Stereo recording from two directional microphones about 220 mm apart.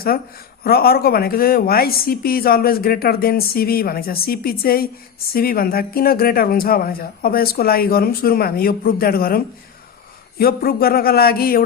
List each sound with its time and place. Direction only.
0.6 s speech: 45° left (ahead or behind)